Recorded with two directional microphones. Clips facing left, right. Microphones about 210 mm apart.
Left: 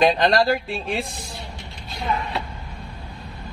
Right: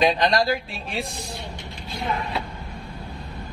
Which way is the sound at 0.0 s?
50° left (ahead or behind).